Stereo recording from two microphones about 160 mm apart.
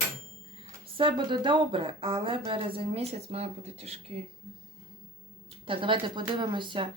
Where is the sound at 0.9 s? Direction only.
30° right (ahead or behind).